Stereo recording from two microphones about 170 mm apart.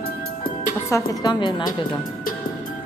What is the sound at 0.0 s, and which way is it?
Music, 60° left (ahead or behind).